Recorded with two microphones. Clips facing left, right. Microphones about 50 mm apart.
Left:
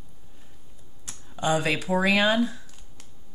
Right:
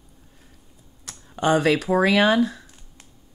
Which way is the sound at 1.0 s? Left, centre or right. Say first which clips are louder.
Right 5 dB; right.